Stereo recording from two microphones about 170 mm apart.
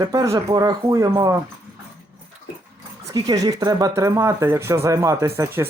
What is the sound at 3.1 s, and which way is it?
Speech, 20° right (ahead or behind).